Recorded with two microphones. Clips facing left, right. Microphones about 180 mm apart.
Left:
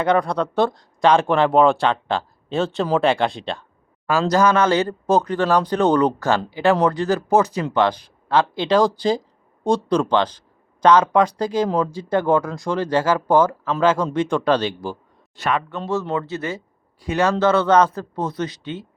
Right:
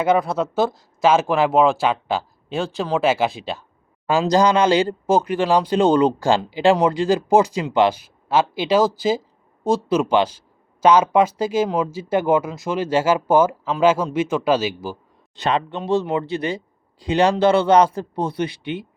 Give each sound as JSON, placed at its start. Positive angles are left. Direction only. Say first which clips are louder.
{"t": 0.0, "sound": "speech", "louder": "even", "side_deg": -5}
{"t": 4.0, "sound": "speech", "louder": "right 1 dB", "side_deg": -15}
{"t": 15.4, "sound": "speech", "louder": "right 1 dB", "side_deg": -20}